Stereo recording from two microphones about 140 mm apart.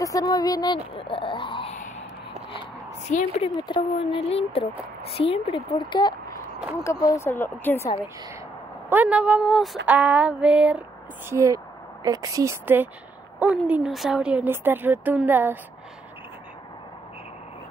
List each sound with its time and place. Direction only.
0.0 s a sound: 25° left (ahead or behind)
0.9 s dog: 40° left (ahead or behind)
1.7 s a sound: 55° left (ahead or behind)
3.1 s a woman's voice: 60° left (ahead or behind)
3.5 s a woman's voice: 35° left (ahead or behind)
7.1 s speech: 20° left (ahead or behind)
8.8 s a woman's voice: 10° right (ahead or behind)
9.8 s a woman's voice: 10° right (ahead or behind)
11.2 s a woman's voice: 20° right (ahead or behind)